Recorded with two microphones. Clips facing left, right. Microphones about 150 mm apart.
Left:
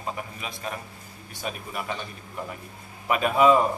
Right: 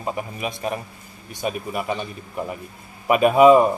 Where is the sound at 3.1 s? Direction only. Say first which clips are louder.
Right 7 dB; 15° right (ahead or behind).